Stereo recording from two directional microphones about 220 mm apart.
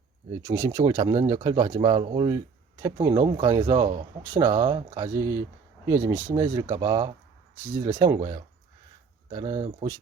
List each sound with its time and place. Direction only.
0.4 s speech: 15° right (ahead or behind)